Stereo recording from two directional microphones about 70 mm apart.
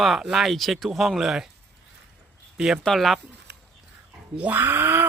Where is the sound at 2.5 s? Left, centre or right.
Centre.